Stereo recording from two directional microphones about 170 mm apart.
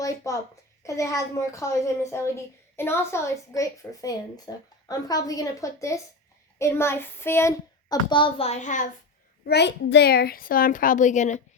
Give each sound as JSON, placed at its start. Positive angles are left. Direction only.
{"t": 0.0, "sound": "a child's voice", "side_deg": 20}
{"t": 8.1, "sound": "a woman's voice", "side_deg": 30}
{"t": 9.5, "sound": "a child's voice", "side_deg": 85}